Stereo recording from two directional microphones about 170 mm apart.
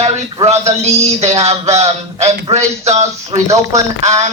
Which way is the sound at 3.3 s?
20° right (ahead or behind).